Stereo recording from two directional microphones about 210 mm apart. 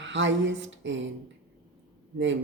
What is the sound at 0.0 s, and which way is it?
Speech, 60° right (ahead or behind).